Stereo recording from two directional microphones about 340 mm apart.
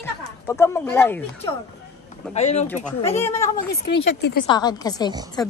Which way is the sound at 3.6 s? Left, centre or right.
Left.